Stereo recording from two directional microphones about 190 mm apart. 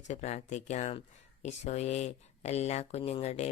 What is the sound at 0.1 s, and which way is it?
Speech, 35° left (ahead or behind).